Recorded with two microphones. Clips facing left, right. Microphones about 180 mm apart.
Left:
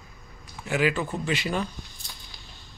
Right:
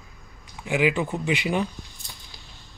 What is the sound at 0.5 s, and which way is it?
Speech, 15° right (ahead or behind).